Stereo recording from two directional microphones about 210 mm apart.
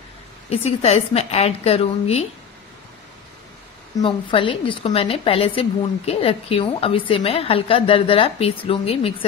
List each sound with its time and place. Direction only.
0.5 s a woman's voice: 30° left (ahead or behind)
4.0 s a woman's voice: 25° left (ahead or behind)